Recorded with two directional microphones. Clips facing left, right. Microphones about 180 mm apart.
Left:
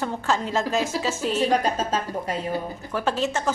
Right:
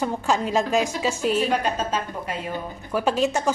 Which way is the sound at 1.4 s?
40° left (ahead or behind).